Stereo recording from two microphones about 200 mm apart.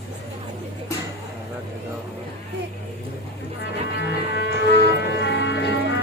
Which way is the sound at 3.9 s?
55° left (ahead or behind).